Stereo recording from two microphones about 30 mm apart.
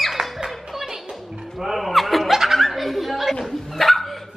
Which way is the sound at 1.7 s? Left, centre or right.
Centre.